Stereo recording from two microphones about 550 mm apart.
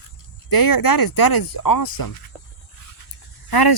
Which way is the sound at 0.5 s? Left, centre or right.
Left.